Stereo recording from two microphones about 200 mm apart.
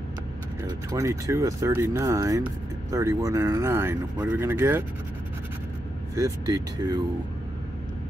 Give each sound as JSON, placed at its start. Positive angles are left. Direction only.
{"t": 0.8, "sound": "speech", "side_deg": -15}
{"t": 6.1, "sound": "speech", "side_deg": -15}